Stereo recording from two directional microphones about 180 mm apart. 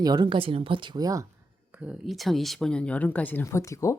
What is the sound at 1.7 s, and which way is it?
Speech, 5° right (ahead or behind).